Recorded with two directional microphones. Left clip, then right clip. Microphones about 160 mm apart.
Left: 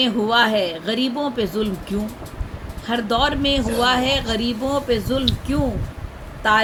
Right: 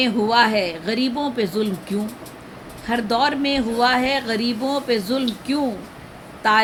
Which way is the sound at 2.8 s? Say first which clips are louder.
Even; 15° right (ahead or behind).